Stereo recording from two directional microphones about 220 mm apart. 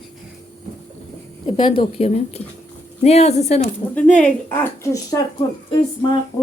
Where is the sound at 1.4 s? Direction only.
25° left (ahead or behind).